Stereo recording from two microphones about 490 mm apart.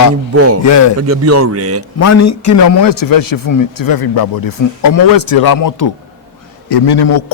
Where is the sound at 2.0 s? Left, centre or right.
Left.